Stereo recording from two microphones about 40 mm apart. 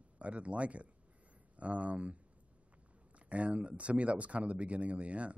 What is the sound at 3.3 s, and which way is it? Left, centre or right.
Speech, right.